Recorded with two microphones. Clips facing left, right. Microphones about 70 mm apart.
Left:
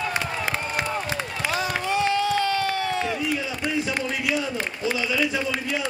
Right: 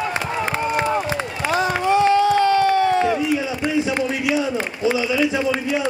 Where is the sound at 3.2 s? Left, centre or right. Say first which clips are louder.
Right 6 dB; centre.